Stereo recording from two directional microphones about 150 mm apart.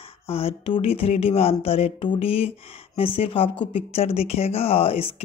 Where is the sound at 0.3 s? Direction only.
40° left (ahead or behind).